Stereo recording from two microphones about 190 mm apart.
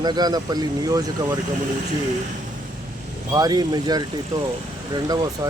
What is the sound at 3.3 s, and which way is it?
Speech, 20° right (ahead or behind).